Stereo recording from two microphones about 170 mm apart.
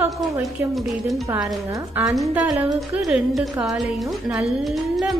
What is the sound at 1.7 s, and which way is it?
A woman's voice, 20° right (ahead or behind).